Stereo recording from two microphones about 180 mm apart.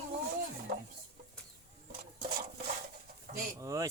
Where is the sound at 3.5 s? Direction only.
15° right (ahead or behind).